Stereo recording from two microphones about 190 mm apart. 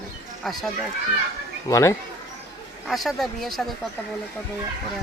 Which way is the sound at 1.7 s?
15° left (ahead or behind).